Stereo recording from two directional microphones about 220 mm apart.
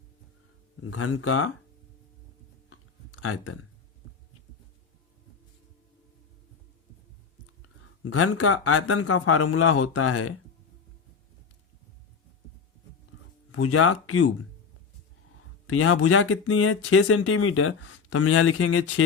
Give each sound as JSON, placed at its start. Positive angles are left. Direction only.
{"t": 0.8, "sound": "speech", "side_deg": 75}
{"t": 2.6, "sound": "a sound", "side_deg": 80}
{"t": 7.6, "sound": "speech", "side_deg": 80}
{"t": 13.5, "sound": "speech", "side_deg": 85}
{"t": 15.6, "sound": "speech", "side_deg": 75}